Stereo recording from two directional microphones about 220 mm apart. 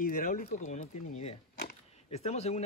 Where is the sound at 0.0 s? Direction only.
40° left (ahead or behind).